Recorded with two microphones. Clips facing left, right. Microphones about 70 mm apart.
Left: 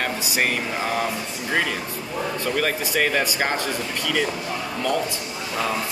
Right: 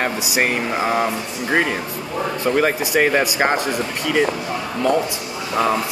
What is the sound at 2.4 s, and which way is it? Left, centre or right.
Speech, right.